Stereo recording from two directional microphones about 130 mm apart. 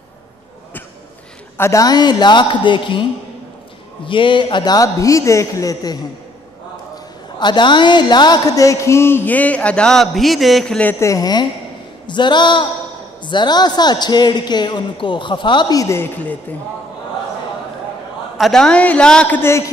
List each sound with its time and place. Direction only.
1.6 s a man's voice: 25° left (ahead or behind)
7.3 s speech: 35° left (ahead or behind); by 10.9 s 5° left (ahead or behind)
10.9 s a man's voice: 20° left (ahead or behind); by 15.8 s 40° left (ahead or behind)
15.8 s speech: 20° left (ahead or behind)
18.4 s a woman's voice: 5° left (ahead or behind)